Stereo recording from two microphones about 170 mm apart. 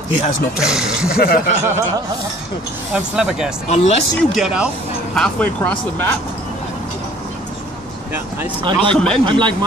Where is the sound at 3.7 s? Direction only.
40° left (ahead or behind).